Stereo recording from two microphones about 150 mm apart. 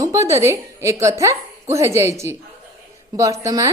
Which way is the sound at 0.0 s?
20° right (ahead or behind).